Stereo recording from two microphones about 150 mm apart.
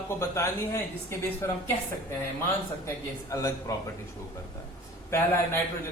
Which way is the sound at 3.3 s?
20° left (ahead or behind).